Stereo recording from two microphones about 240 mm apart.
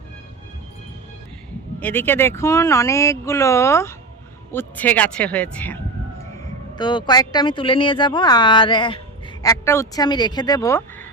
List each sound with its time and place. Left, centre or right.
1.8 s speech: centre
6.7 s speech: centre